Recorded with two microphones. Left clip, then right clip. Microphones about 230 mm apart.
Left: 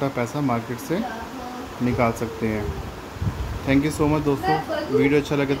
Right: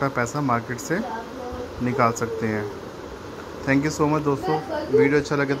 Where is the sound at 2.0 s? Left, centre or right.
Centre.